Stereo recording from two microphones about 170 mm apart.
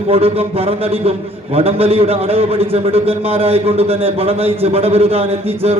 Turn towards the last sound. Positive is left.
turn(degrees=-35)  # may be behind; listen again after turning